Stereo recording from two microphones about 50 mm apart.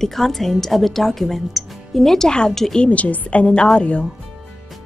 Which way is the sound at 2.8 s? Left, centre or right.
Left.